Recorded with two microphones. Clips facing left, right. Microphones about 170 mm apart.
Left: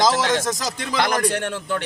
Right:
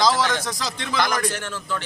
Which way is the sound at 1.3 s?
65° left (ahead or behind).